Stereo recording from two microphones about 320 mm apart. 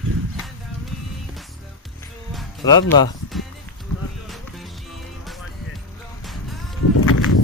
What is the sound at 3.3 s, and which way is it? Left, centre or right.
Run, centre.